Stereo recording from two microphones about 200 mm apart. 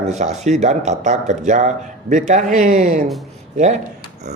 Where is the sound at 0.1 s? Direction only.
35° right (ahead or behind).